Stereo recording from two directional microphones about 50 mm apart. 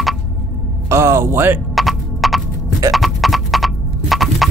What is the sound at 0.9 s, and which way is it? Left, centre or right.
Music, right.